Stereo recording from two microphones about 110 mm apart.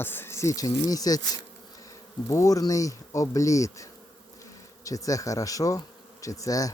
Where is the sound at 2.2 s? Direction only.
30° left (ahead or behind).